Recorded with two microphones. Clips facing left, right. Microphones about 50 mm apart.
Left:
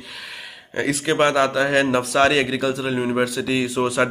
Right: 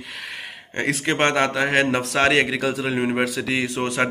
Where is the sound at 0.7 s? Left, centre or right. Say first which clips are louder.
Left 1 dB; right.